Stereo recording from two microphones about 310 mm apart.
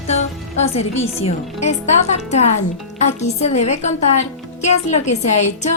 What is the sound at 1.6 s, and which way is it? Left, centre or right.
A woman's voice, left.